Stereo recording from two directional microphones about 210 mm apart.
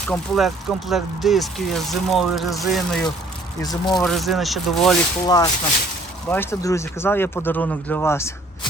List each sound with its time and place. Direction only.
0.1 s speech: centre (ahead or behind)
3.6 s speech: 20° left (ahead or behind)
3.9 s speech: centre (ahead or behind)
5.2 s speech: 20° left (ahead or behind)